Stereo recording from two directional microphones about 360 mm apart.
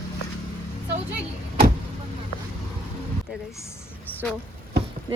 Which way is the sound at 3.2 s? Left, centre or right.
Centre.